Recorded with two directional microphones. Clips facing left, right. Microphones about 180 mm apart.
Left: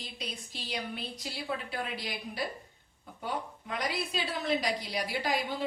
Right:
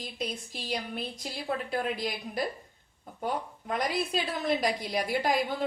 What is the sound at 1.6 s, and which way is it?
A woman's voice, 50° right (ahead or behind).